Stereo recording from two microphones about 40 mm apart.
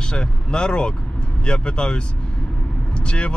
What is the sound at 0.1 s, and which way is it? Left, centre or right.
Speech, left.